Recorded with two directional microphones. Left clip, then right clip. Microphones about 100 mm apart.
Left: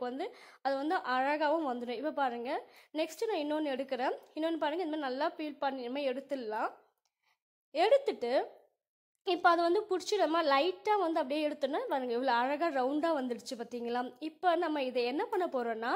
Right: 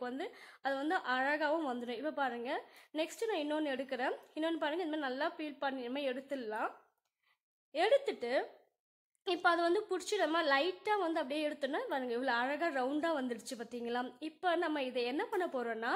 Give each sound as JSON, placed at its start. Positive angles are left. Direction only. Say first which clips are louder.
{"t": 0.2, "sound": "a woman's voice", "louder": "left 3 dB", "side_deg": 30}
{"t": 7.7, "sound": "speech", "louder": "left 3 dB", "side_deg": 30}